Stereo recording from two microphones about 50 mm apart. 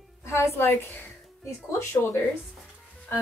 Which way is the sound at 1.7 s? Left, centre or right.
Left.